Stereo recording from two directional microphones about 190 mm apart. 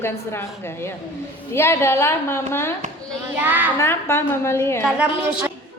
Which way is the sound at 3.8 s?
15° left (ahead or behind).